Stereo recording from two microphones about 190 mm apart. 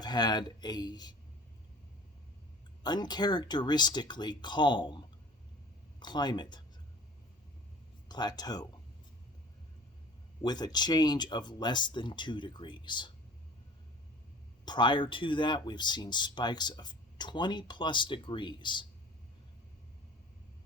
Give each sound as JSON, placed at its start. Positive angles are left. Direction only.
{"t": 0.0, "sound": "speech", "side_deg": 20}
{"t": 2.8, "sound": "speech", "side_deg": 20}
{"t": 8.0, "sound": "speech", "side_deg": 20}
{"t": 10.4, "sound": "speech", "side_deg": 20}
{"t": 14.6, "sound": "speech", "side_deg": 25}